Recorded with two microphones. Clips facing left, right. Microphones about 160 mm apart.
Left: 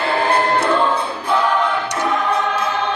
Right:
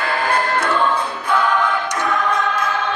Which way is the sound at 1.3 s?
30° left (ahead or behind).